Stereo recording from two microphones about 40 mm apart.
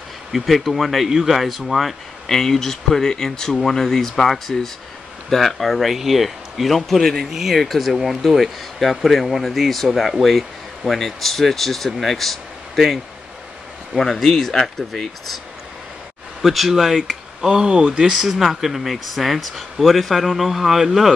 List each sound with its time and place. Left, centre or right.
0.3 s speech: centre
2.2 s speech: centre
7.2 s speech: centre
7.5 s speech: centre
14.1 s speech: centre
17.5 s speech: centre
18.1 s speech: centre